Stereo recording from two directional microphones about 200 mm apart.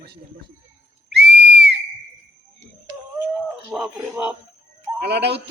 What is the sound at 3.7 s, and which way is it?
Speech, centre (ahead or behind).